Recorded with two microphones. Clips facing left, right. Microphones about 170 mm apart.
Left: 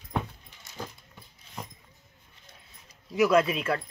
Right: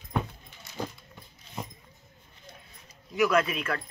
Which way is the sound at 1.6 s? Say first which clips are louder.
Right 3 dB; 5° right (ahead or behind).